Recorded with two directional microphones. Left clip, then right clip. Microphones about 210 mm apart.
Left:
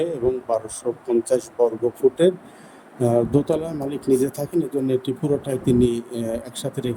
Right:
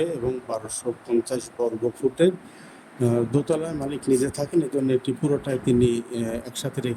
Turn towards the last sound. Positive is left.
turn(degrees=10)  # may be behind; listen again after turning